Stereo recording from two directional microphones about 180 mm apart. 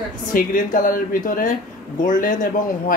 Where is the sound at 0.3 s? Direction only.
50° left (ahead or behind).